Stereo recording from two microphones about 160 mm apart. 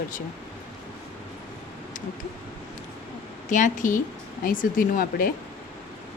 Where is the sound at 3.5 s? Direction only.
50° left (ahead or behind).